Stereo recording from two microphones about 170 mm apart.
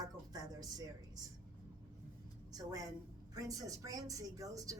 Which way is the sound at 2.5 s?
20° right (ahead or behind).